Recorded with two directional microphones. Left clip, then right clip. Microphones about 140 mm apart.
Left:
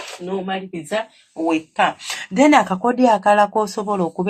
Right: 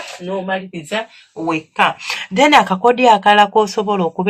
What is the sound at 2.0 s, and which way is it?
Speech, 35° left (ahead or behind).